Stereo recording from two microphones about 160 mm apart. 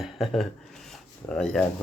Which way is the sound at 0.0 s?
Centre (ahead or behind).